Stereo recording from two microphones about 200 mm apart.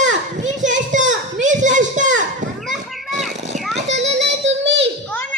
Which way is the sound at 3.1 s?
35° right (ahead or behind).